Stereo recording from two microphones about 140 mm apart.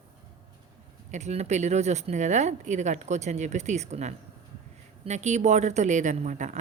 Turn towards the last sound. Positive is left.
turn(degrees=-60)  # may be behind; listen again after turning